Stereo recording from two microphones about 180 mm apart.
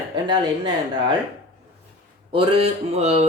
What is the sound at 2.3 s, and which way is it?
Speech, 30° right (ahead or behind).